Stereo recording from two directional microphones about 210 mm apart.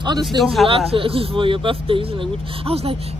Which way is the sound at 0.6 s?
25° right (ahead or behind).